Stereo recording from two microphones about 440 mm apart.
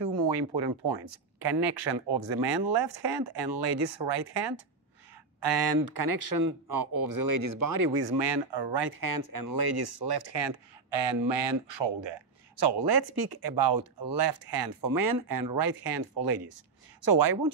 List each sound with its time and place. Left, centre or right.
0.6 s speech: right
5.8 s speech: right
7.7 s speech: right